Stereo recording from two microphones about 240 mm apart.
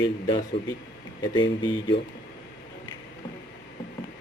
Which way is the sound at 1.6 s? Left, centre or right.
Centre.